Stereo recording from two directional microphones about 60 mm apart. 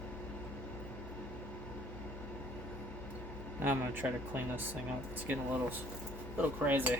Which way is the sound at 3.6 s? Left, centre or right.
Right.